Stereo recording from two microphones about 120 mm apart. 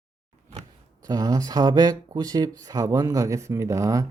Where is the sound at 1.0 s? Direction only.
30° right (ahead or behind).